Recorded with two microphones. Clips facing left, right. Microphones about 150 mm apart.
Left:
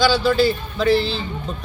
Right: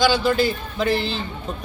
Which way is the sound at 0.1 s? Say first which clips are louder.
Left 2 dB; 50° right (ahead or behind).